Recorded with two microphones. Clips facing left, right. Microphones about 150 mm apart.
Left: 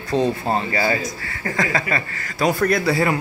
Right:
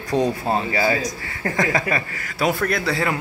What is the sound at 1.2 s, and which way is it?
A man's voice, 20° right (ahead or behind).